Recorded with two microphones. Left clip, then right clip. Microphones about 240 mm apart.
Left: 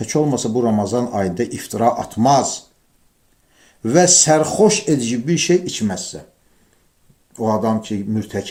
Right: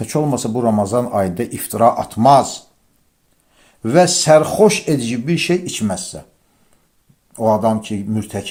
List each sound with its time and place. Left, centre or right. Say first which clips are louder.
0.0 s speech: even; right
7.3 s speech: right 4 dB; right